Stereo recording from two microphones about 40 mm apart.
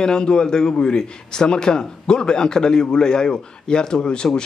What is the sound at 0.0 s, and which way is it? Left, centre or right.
A man's voice, centre.